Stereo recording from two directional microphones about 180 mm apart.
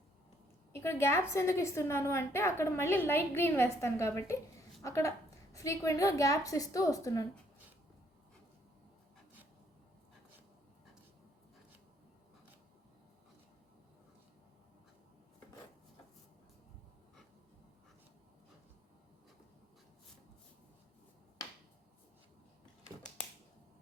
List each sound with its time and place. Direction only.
0.7 s a woman's voice: 15° left (ahead or behind)